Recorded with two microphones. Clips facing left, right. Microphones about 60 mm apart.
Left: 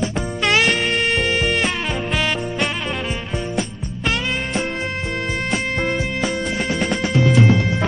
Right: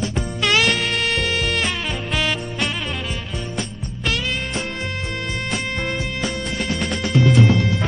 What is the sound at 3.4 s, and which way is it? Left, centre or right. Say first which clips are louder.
Music: left 4 dB; centre.